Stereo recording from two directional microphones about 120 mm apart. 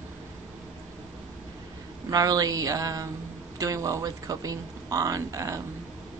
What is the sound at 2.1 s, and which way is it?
Speech, 30° right (ahead or behind).